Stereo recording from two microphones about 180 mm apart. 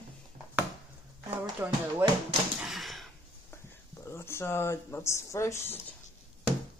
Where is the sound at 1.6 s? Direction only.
15° right (ahead or behind).